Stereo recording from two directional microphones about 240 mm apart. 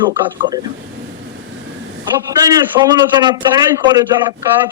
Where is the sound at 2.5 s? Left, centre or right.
Centre.